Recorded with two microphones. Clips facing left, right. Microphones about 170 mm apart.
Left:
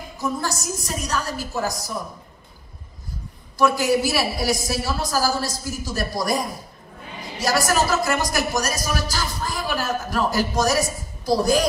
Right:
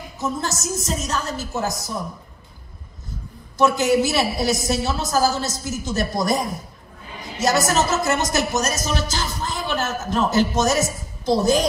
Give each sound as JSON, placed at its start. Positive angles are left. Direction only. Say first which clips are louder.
{"t": 0.2, "sound": "speech", "louder": "even", "side_deg": -20}
{"t": 3.5, "sound": "speech", "louder": "right 2 dB", "side_deg": -20}